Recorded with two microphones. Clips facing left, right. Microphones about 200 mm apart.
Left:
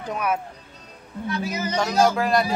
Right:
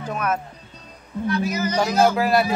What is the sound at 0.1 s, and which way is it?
Speech, 10° left (ahead or behind).